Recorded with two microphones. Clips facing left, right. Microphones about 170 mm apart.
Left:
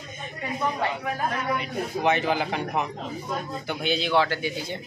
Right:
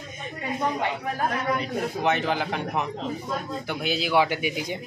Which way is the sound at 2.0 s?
Centre (ahead or behind).